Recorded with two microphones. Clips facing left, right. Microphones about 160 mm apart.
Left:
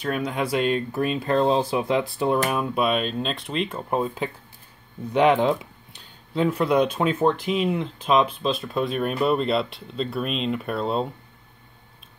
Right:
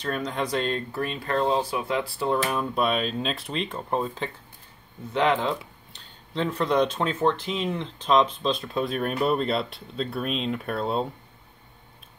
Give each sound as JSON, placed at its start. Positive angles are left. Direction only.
{"t": 0.0, "sound": "speech", "side_deg": 10}